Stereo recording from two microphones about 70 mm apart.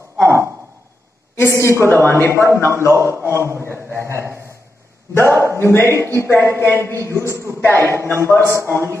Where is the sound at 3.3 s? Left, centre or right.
Right.